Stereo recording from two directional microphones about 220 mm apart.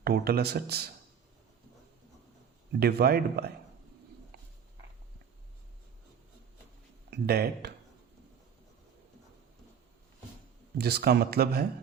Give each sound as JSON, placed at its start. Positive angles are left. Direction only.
{"t": 0.0, "sound": "speech", "side_deg": -45}
{"t": 2.8, "sound": "speech", "side_deg": -45}
{"t": 7.1, "sound": "speech", "side_deg": -45}
{"t": 10.8, "sound": "speech", "side_deg": -45}